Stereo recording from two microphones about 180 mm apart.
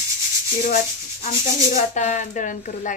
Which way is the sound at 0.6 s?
50° left (ahead or behind).